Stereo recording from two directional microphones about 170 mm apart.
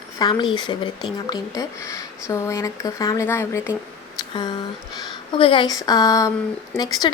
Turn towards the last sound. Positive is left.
turn(degrees=25)  # may be behind; listen again after turning